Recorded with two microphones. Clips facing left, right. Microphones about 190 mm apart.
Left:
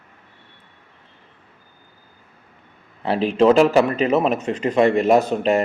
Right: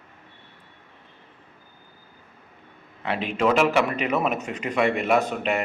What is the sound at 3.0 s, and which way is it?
Speech, 35° left (ahead or behind).